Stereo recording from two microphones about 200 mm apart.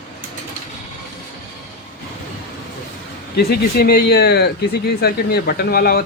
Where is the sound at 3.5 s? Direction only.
50° left (ahead or behind).